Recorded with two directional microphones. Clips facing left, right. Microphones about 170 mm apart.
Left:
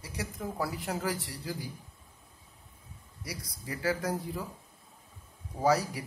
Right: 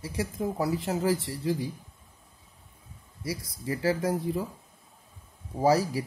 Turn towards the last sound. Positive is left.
turn(degrees=-30)  # may be behind; listen again after turning